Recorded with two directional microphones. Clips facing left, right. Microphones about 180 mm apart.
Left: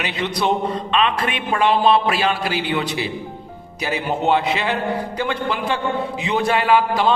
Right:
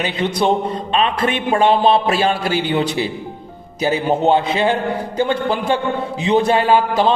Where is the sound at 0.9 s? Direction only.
35° right (ahead or behind).